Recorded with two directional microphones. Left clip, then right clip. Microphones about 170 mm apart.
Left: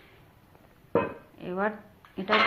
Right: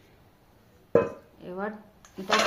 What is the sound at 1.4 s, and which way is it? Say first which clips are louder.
Speech: left 5 dB; 45° left (ahead or behind).